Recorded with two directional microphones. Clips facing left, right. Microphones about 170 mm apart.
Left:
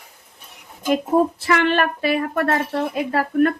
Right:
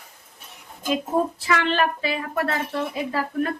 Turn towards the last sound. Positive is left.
turn(degrees=60)  # may be behind; listen again after turning